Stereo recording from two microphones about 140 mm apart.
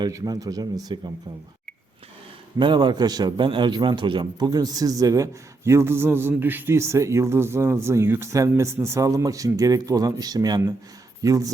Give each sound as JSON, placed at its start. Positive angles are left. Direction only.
{"t": 0.0, "sound": "a man's voice", "side_deg": -25}
{"t": 2.6, "sound": "a man's voice", "side_deg": -35}